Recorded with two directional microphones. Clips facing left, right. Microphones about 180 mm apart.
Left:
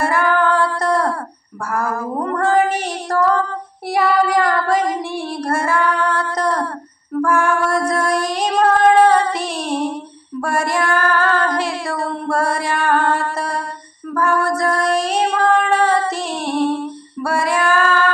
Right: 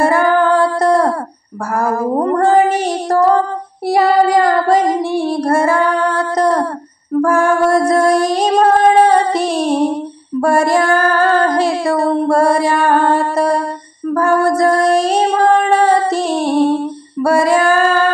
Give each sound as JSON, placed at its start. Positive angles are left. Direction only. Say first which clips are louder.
{"t": 0.0, "sound": "female singing", "louder": "right 5 dB", "side_deg": -35}
{"t": 1.7, "sound": "child singing", "louder": "right 6 dB", "side_deg": -35}
{"t": 7.2, "sound": "music", "louder": "right 5 dB", "side_deg": -35}
{"t": 10.4, "sound": "female singing", "louder": "right 7 dB", "side_deg": -35}